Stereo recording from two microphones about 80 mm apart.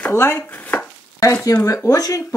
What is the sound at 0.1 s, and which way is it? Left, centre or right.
Speech, left.